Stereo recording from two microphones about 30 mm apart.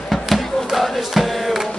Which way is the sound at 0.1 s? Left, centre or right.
Centre.